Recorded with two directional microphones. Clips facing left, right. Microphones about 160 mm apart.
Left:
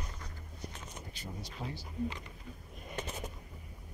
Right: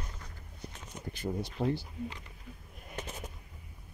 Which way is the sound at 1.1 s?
60° right (ahead or behind).